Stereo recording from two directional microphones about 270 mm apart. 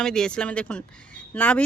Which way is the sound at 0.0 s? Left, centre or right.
Centre.